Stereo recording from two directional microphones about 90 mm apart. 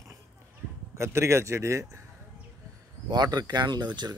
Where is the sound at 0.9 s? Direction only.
30° right (ahead or behind).